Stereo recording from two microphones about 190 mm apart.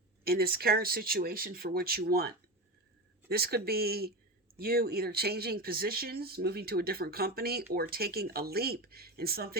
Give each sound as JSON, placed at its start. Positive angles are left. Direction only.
{"t": 0.3, "sound": "speech", "side_deg": -55}